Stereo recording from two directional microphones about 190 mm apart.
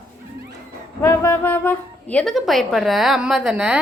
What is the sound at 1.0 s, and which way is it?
A woman's voice, 15° left (ahead or behind).